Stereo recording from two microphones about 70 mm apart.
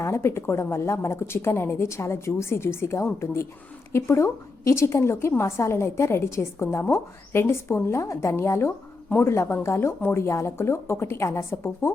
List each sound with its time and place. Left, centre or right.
0.0 s a woman's voice: left